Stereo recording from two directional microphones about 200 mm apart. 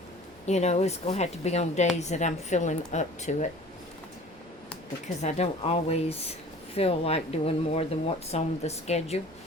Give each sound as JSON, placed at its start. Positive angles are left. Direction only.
{"t": 0.4, "sound": "a woman's voice", "side_deg": 35}
{"t": 5.0, "sound": "a woman's voice", "side_deg": 35}